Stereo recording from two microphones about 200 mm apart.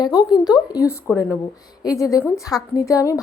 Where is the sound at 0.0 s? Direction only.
20° left (ahead or behind).